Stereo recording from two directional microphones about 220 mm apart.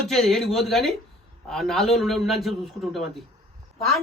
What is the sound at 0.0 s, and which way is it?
A man's voice, centre (ahead or behind).